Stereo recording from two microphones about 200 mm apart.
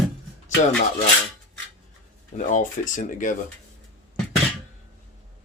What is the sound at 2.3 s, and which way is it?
Speech, 40° left (ahead or behind).